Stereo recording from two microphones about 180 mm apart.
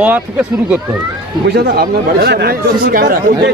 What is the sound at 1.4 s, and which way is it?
Speech, 60° right (ahead or behind).